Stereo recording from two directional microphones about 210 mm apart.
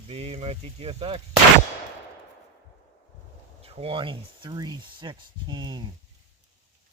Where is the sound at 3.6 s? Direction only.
30° right (ahead or behind).